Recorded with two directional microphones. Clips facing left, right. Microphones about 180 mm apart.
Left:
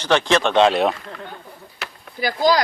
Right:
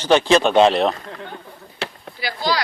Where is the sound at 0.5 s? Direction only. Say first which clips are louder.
Right 1 dB; centre (ahead or behind).